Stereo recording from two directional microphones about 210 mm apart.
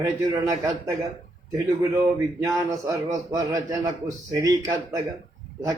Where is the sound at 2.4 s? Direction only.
15° right (ahead or behind).